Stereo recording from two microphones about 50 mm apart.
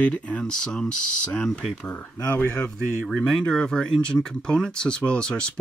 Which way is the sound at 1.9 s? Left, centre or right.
Left.